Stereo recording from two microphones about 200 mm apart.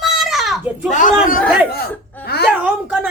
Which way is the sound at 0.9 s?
40° left (ahead or behind).